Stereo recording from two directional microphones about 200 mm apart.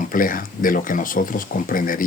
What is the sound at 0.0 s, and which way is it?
Speech, 45° left (ahead or behind).